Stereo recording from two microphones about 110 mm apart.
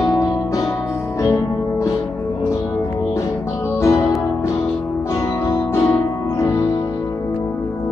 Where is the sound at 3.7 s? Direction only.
25° left (ahead or behind).